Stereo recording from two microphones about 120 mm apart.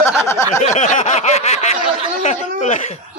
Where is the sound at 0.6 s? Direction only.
80° left.